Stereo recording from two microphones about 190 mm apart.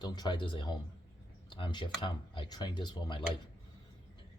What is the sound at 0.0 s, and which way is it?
Speech, 25° left (ahead or behind).